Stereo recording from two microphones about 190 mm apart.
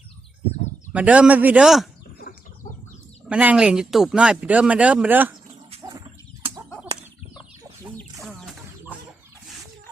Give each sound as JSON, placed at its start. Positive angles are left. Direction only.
{"t": 0.9, "sound": "speech", "side_deg": -5}
{"t": 3.2, "sound": "speech", "side_deg": -5}
{"t": 5.7, "sound": "a sound", "side_deg": -30}